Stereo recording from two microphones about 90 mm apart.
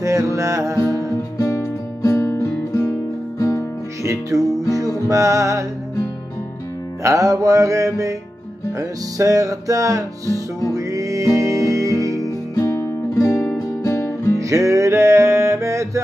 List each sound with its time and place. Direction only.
0.0 s music: 35° right (ahead or behind)
1.4 s music: 35° left (ahead or behind)
4.0 s music: 35° right (ahead or behind)
7.0 s music: 35° right (ahead or behind)
12.5 s music: 35° left (ahead or behind)
14.4 s music: 35° right (ahead or behind)